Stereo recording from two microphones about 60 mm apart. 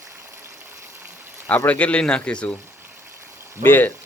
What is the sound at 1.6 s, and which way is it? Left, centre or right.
Speech, left.